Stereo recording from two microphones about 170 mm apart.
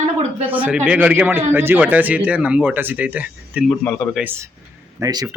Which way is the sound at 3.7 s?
5° left (ahead or behind).